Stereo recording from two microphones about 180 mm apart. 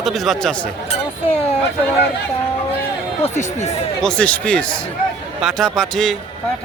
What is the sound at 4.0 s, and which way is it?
Speech, 5° left (ahead or behind).